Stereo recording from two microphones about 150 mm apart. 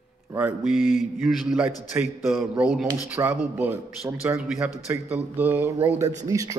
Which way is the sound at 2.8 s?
20° right (ahead or behind).